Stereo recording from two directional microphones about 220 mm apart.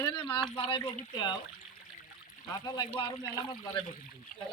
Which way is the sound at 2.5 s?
20° left (ahead or behind).